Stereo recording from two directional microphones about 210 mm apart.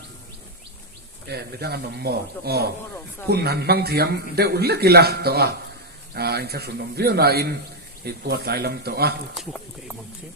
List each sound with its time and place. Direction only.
1.3 s a man's voice: 50° right (ahead or behind)
9.3 s speech: centre (ahead or behind)